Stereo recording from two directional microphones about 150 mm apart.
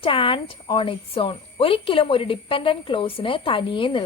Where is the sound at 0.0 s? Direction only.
35° left (ahead or behind).